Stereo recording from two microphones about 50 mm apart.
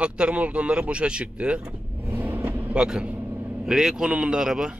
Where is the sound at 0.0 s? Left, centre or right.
Right.